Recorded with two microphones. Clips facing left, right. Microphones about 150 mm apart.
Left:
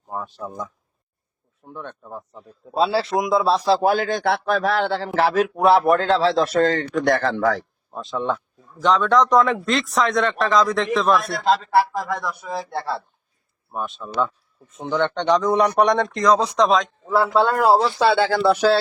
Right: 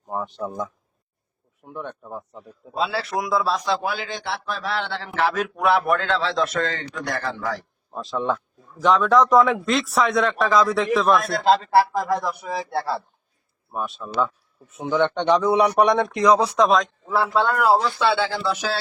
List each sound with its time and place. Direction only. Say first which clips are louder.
0.1 s speech: right 2 dB; 20° right (ahead or behind)
1.6 s a man's voice: right 2 dB; 10° right (ahead or behind)
2.7 s a man's voice: left 5 dB; 30° left (ahead or behind)
7.1 s a man's voice: left 8 dB; 55° left (ahead or behind)
7.9 s speech: even; centre (ahead or behind)
11.4 s speech: right 1 dB; 30° right (ahead or behind)
13.7 s a man's voice: even; centre (ahead or behind)
17.4 s speech: left 1 dB; 30° left (ahead or behind)
18.0 s speech: left 5 dB; 45° left (ahead or behind)